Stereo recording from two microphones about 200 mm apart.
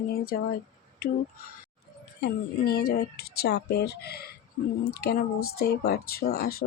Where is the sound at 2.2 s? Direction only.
50° left (ahead or behind).